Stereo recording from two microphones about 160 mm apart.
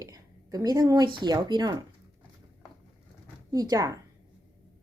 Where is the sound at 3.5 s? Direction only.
25° right (ahead or behind).